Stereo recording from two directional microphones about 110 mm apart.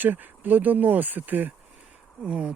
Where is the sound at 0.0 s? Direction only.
15° right (ahead or behind).